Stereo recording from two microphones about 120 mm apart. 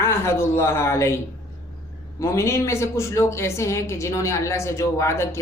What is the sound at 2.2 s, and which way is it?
A woman's voice, 25° left (ahead or behind).